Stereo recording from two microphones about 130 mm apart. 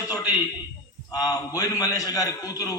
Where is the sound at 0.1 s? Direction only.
30° left (ahead or behind).